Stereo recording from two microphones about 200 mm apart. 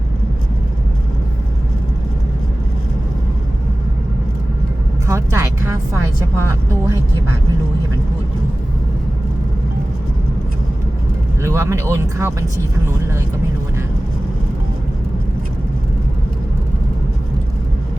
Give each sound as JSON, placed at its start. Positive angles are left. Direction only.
{"t": 5.0, "sound": "vehicle", "side_deg": -15}
{"t": 6.3, "sound": "speech", "side_deg": -15}
{"t": 11.4, "sound": "speech", "side_deg": -15}